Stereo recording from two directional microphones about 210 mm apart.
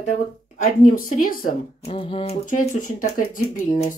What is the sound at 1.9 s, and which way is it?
Speech, 25° left (ahead or behind).